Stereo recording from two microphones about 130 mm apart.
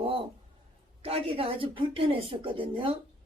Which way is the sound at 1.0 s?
50° right (ahead or behind).